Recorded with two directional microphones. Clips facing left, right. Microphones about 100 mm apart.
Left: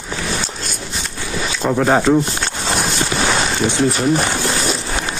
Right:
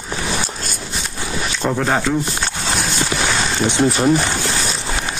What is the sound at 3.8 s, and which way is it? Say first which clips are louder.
Speech: right 2 dB; 25° right (ahead or behind).